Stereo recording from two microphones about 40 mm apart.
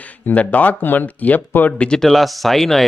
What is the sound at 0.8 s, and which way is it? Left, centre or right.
Speech, left.